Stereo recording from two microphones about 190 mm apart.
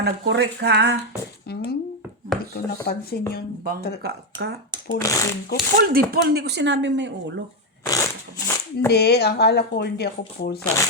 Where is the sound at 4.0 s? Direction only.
60° right (ahead or behind).